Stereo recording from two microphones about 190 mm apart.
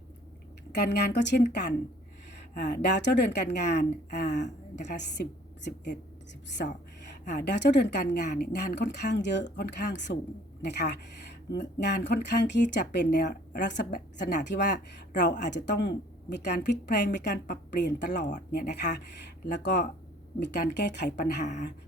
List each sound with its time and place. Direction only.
0.7 s a woman's voice: 65° left (ahead or behind)
6.6 s a woman's voice: 55° left (ahead or behind)